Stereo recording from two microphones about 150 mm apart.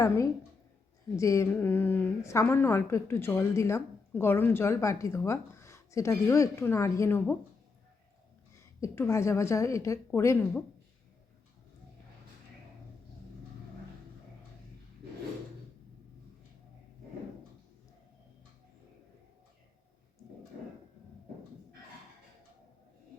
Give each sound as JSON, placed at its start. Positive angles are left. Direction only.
{"t": 1.1, "sound": "a woman's voice", "side_deg": 20}
{"t": 8.8, "sound": "a woman's voice", "side_deg": 20}